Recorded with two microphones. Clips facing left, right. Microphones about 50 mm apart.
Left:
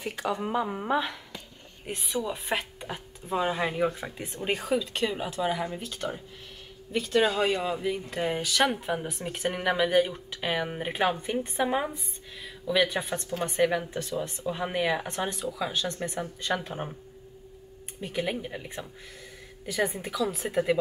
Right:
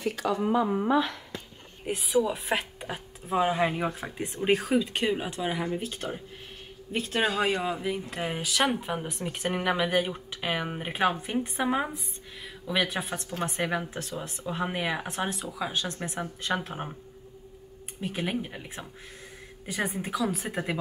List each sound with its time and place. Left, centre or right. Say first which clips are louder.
0.0 s speech: right 2 dB; centre
0.4 s speech: right 4 dB; centre
1.9 s speech: right 5 dB; centre
4.6 s speech: right 2 dB; right
5.8 s a man's voice: even; right
7.2 s speech: left 1 dB; centre
9.5 s speech: left 1 dB; centre
18.0 s speech: even; centre
19.6 s speech: left 2 dB; centre